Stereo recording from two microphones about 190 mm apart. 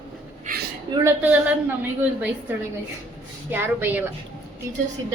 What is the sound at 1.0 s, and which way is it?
Speech, 10° right (ahead or behind).